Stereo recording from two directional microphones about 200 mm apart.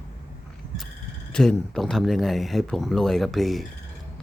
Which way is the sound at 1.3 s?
5° left (ahead or behind).